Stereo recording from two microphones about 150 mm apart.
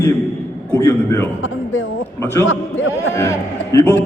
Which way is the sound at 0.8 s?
15° left (ahead or behind).